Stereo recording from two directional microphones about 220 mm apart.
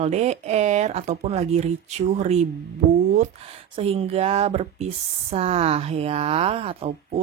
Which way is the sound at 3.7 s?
25° right (ahead or behind).